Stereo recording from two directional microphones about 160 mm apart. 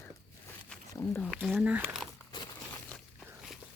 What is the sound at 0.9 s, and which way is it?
Speech, 15° left (ahead or behind).